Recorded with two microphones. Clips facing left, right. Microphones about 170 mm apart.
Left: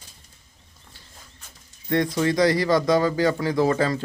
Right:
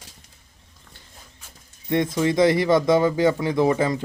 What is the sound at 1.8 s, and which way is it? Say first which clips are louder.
Speech: right 1 dB; 20° right (ahead or behind).